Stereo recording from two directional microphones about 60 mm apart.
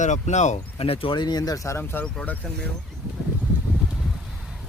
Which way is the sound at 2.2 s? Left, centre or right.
Left.